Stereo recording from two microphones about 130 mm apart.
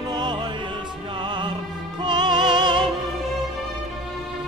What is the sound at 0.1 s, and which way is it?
Music, 35° right (ahead or behind).